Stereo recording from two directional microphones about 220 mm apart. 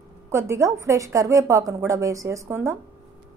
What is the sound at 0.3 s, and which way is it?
A woman's voice, 15° right (ahead or behind).